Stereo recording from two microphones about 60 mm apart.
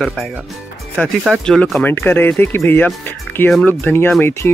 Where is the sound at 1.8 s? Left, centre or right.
Left.